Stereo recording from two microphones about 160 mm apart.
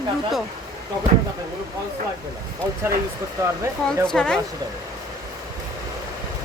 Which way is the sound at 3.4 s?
20° right (ahead or behind).